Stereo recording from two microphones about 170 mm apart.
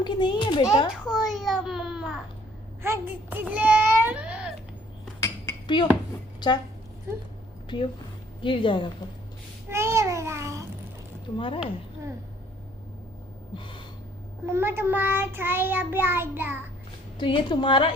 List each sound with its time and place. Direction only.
0.0 s a woman's voice: 25° left (ahead or behind)
1.0 s a child's voice: 5° right (ahead or behind)
2.8 s child singing: 15° right (ahead or behind)
5.2 s dishes: 25° left (ahead or behind)
6.4 s a woman's voice: 25° left (ahead or behind)
7.7 s a woman's voice: 25° left (ahead or behind)
9.6 s babbling: 15° right (ahead or behind)
11.3 s a woman's voice: 30° left (ahead or behind)
13.6 s gasp: 30° left (ahead or behind)
14.4 s child singing: 15° right (ahead or behind)
17.2 s a woman's voice: 30° left (ahead or behind)